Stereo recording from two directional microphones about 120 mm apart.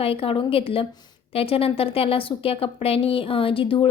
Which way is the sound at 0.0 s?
50° left (ahead or behind).